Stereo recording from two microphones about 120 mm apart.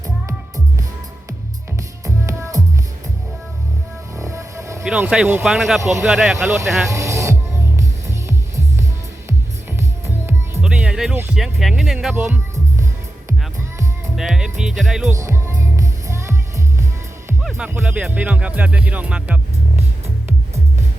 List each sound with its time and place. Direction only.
2.0 s music: 25° right (ahead or behind)
4.2 s music: 25° right (ahead or behind)
4.8 s speech: 10° right (ahead or behind)
6.9 s music: 25° right (ahead or behind)
10.6 s music: 10° right (ahead or behind)
11.3 s speech: centre (ahead or behind)
12.1 s speech: 15° right (ahead or behind)
14.2 s speech: 5° right (ahead or behind)
15.2 s music: 25° right (ahead or behind)
17.6 s speech: 10° right (ahead or behind)